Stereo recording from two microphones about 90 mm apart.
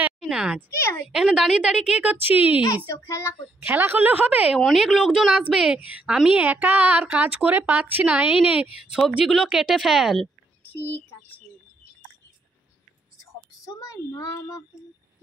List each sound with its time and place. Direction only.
0.2 s a sound: 5° right (ahead or behind)
0.7 s speech: 25° left (ahead or behind)
1.1 s a woman's voice: 5° right (ahead or behind)
2.9 s a child's voice: 35° left (ahead or behind)
3.6 s a woman's voice: 20° right (ahead or behind)
4.7 s a woman's voice: 5° right (ahead or behind)
13.7 s a child's voice: 40° left (ahead or behind)